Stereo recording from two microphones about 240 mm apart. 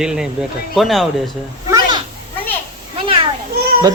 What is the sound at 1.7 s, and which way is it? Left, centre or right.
Children playing, centre.